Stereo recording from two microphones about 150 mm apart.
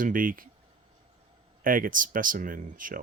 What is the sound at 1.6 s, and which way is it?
Speech, 65° right (ahead or behind).